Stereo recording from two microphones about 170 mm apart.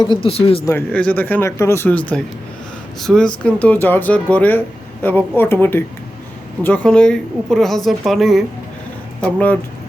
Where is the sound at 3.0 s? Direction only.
5° left (ahead or behind).